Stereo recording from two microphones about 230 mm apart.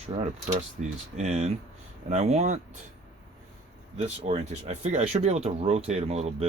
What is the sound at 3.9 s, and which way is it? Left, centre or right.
Speech, right.